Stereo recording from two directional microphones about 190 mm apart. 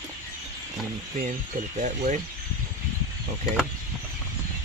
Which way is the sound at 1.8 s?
40° right (ahead or behind).